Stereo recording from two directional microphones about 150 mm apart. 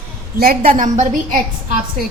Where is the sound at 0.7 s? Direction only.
55° right (ahead or behind).